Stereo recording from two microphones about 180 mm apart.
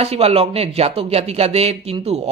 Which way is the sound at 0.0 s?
35° right (ahead or behind).